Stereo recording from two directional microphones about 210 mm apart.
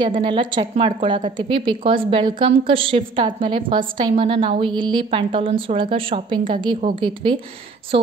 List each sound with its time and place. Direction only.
0.0 s a woman's voice: 20° right (ahead or behind)